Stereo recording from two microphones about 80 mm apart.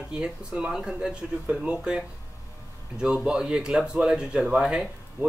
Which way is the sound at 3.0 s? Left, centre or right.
Centre.